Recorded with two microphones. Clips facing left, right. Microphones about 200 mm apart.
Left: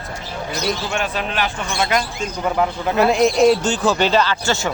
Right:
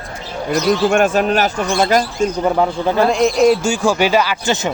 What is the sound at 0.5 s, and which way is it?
Speech, 50° right (ahead or behind).